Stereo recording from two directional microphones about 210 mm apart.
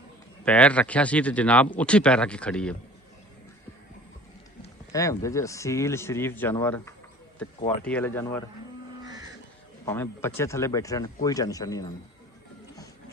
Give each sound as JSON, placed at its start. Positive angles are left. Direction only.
{"t": 0.4, "sound": "speech", "side_deg": 5}
{"t": 4.9, "sound": "speech", "side_deg": 15}
{"t": 9.8, "sound": "speech", "side_deg": 10}